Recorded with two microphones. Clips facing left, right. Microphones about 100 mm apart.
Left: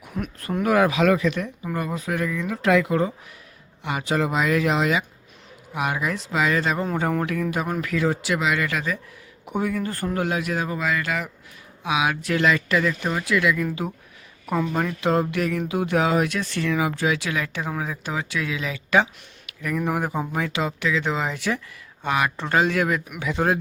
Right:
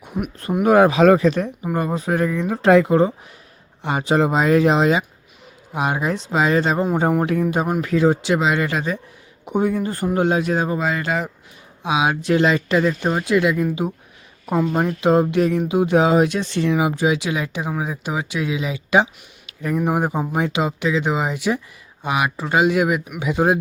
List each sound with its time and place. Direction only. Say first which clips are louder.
0.0 s speech: right 4 dB; 20° right (ahead or behind)